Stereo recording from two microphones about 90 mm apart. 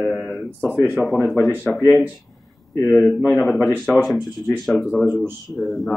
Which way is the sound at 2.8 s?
30° left (ahead or behind).